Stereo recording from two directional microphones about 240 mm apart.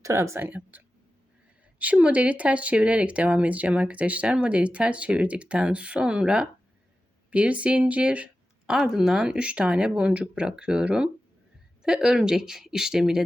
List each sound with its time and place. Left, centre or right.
0.0 s speech: centre
1.8 s speech: centre